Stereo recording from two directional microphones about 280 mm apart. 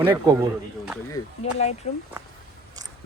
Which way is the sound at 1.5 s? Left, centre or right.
Left.